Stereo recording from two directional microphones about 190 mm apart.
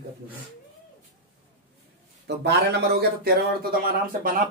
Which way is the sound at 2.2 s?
60° right (ahead or behind).